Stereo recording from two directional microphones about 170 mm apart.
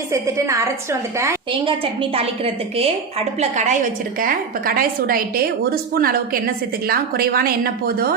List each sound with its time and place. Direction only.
0.1 s a woman's voice: 20° right (ahead or behind)
1.6 s a woman's voice: 35° right (ahead or behind)
4.2 s a woman's voice: 55° right (ahead or behind)